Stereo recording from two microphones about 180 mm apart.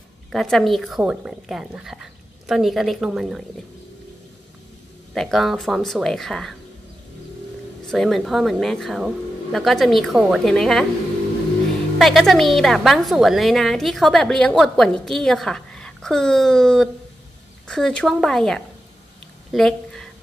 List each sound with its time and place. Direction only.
0.3 s a woman's voice: centre (ahead or behind)
5.1 s a woman's voice: centre (ahead or behind)
7.9 s a woman's voice: centre (ahead or behind)
12.0 s a woman's voice: centre (ahead or behind)
19.5 s a sound: 5° left (ahead or behind)